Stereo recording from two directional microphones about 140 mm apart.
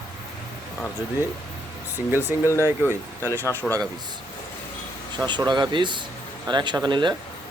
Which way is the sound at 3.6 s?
Centre (ahead or behind).